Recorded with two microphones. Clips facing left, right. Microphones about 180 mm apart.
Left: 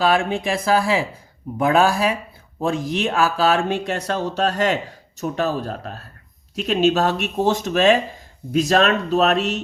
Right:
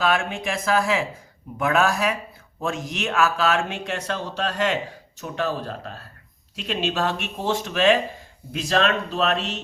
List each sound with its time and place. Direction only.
0.0 s a man's voice: 35° left (ahead or behind)